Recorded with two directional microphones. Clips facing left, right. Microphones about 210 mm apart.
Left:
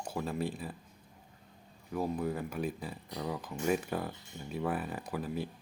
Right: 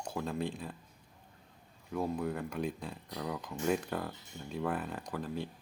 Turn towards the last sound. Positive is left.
turn(degrees=5)  # may be behind; listen again after turning